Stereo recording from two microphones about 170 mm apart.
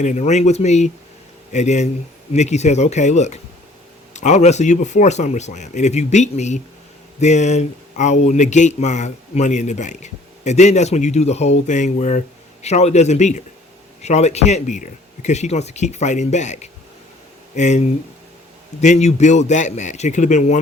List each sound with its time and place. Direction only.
0.0 s speech: 45° left (ahead or behind)